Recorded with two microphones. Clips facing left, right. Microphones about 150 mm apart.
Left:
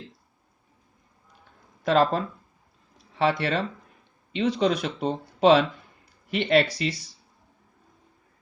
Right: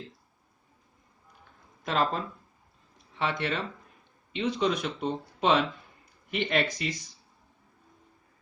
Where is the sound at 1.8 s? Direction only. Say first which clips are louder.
Left 7 dB; 35° left (ahead or behind).